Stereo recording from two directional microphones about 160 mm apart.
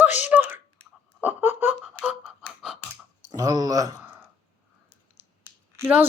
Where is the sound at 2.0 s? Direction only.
5° right (ahead or behind).